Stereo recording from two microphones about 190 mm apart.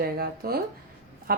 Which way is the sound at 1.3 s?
50° right (ahead or behind).